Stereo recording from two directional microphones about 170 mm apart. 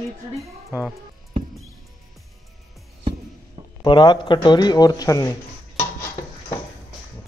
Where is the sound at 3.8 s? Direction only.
25° left (ahead or behind).